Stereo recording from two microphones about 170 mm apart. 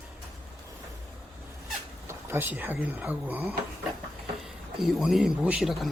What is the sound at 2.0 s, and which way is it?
Speech, 15° right (ahead or behind).